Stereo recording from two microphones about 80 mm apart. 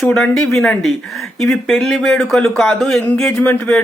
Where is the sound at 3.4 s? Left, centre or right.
Centre.